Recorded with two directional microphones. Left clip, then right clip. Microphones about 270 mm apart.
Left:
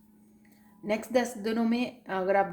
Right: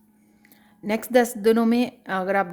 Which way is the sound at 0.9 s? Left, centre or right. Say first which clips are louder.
Right 7 dB; right.